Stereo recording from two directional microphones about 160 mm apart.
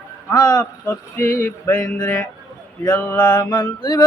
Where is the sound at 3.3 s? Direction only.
25° left (ahead or behind).